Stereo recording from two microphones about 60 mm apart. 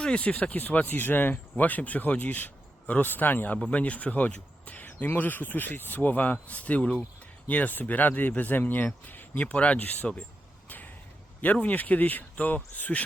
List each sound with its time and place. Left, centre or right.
0.0 s speech: centre
10.7 s a sound: left
11.5 s speech: left